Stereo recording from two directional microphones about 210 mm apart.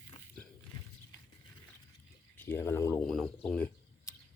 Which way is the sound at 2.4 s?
10° left (ahead or behind).